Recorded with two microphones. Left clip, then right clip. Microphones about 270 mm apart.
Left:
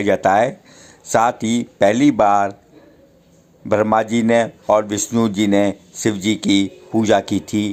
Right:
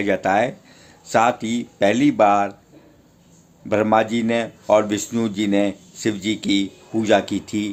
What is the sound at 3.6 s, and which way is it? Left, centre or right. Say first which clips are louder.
Speech: left 2 dB; centre.